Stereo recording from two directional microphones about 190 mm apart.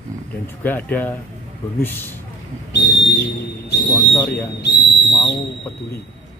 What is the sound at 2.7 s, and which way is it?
Speech, 70° left (ahead or behind).